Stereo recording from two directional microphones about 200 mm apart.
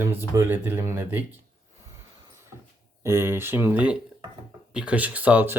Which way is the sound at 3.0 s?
10° right (ahead or behind).